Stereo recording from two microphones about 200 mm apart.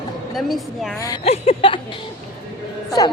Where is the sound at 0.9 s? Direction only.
15° left (ahead or behind).